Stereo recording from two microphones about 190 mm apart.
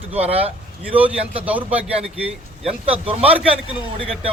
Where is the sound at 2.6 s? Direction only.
30° right (ahead or behind).